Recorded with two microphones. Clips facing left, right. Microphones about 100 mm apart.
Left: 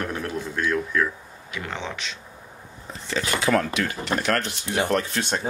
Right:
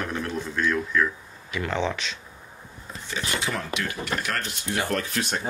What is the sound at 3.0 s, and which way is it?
Speech, 90° left.